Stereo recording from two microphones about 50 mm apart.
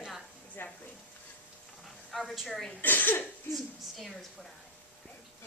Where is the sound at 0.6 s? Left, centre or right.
Left.